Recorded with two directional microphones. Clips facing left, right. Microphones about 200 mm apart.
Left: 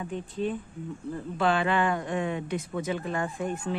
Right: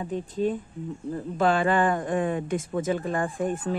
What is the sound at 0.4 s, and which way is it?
Speech, 40° right (ahead or behind).